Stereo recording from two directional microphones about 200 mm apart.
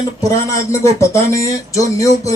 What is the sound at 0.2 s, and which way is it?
Speech, 15° left (ahead or behind).